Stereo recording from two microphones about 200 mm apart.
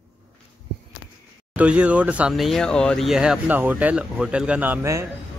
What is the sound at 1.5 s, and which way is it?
Speech, 5° right (ahead or behind).